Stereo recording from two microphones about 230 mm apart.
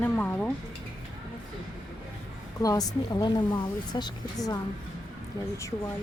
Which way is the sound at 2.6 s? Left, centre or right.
Centre.